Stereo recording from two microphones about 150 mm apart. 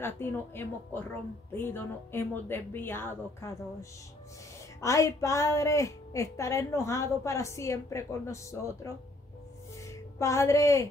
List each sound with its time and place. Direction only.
0.0 s speech: 15° left (ahead or behind)
4.8 s a woman's voice: 20° left (ahead or behind)
10.1 s a woman's voice: 20° left (ahead or behind)